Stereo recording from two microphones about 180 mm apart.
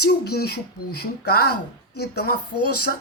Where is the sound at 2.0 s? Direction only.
65° left (ahead or behind).